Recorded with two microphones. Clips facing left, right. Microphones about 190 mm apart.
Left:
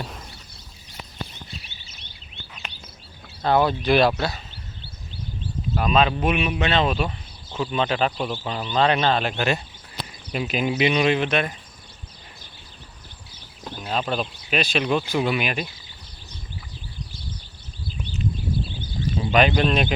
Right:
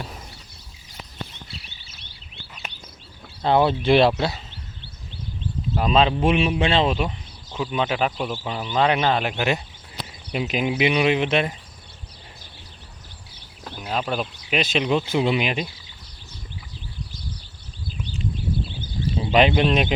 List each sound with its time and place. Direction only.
3.4 s speech: 20° right (ahead or behind)
5.7 s speech: 25° right (ahead or behind)
7.6 s speech: 10° right (ahead or behind)
13.7 s speech: 10° right (ahead or behind)
19.0 s speech: 25° right (ahead or behind)